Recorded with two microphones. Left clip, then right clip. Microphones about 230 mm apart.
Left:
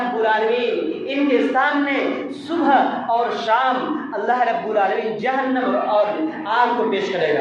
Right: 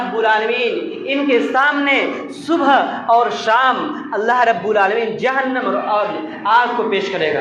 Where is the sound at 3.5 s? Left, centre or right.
Right.